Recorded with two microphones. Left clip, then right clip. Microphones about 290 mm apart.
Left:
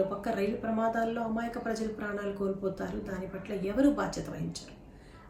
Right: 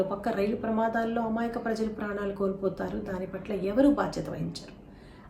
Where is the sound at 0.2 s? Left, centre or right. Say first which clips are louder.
Right 3 dB; centre.